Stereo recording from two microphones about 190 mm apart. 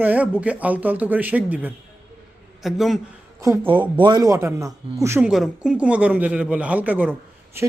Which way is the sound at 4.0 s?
20° right (ahead or behind).